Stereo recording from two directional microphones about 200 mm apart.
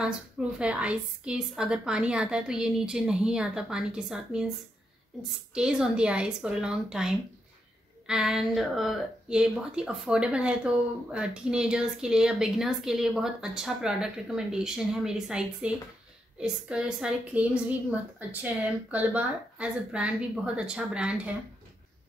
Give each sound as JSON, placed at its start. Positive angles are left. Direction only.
{"t": 0.0, "sound": "speech", "side_deg": -5}
{"t": 5.5, "sound": "speech", "side_deg": -5}